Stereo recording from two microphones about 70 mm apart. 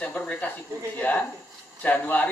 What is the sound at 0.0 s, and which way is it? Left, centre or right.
Speech, centre.